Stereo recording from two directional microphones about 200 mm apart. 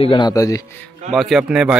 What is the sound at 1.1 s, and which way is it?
Speech, centre (ahead or behind).